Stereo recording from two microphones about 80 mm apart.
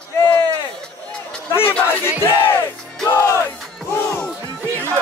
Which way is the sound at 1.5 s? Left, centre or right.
Left.